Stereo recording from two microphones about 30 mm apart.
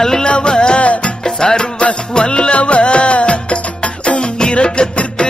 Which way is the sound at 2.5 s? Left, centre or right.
Left.